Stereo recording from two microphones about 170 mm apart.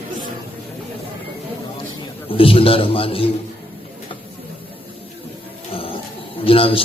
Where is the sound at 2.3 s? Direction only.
30° left (ahead or behind).